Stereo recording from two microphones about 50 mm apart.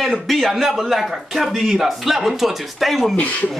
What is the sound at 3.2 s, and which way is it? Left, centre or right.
Speech, left.